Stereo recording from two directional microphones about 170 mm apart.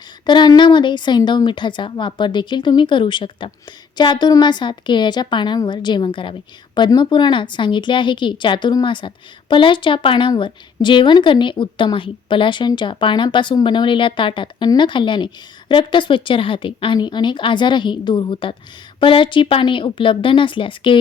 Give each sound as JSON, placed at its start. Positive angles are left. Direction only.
{"t": 0.3, "sound": "a woman's voice", "side_deg": 25}